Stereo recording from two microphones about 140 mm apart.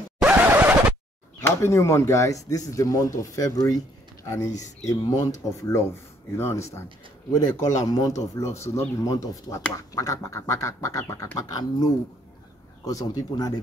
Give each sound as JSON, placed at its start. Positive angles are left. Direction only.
{"t": 0.2, "sound": "scratch", "side_deg": -10}
{"t": 1.4, "sound": "speech", "side_deg": 20}